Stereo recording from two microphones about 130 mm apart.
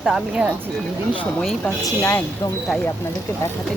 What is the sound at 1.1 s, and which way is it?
Speech, 10° left (ahead or behind).